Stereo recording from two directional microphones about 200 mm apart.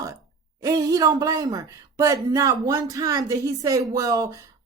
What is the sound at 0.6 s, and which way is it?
Speech, 15° right (ahead or behind).